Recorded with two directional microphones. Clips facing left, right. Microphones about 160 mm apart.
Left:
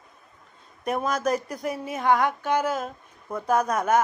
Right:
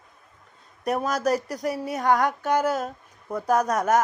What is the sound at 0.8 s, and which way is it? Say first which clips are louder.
Speech: right 1 dB; 35° right (ahead or behind).